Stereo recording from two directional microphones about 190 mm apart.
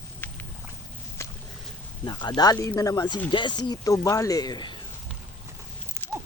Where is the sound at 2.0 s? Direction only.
20° left (ahead or behind).